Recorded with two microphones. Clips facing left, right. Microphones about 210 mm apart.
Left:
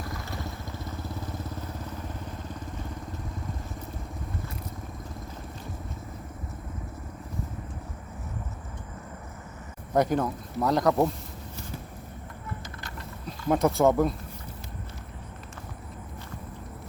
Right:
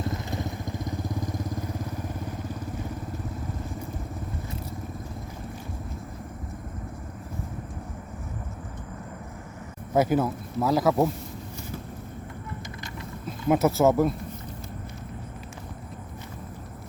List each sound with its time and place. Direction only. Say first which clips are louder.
0.0 s vehicle: right 5 dB; 20° right (ahead or behind)
9.9 s speech: right 2 dB; 5° right (ahead or behind)
13.5 s speech: right 1 dB; 5° right (ahead or behind)